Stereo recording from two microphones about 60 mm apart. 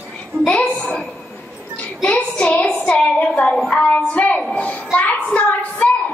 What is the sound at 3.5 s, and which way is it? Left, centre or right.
Speech, centre.